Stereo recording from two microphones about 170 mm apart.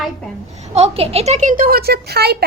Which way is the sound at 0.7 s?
35° right (ahead or behind).